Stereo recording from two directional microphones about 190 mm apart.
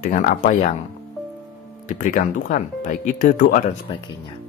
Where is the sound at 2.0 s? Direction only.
45° left (ahead or behind).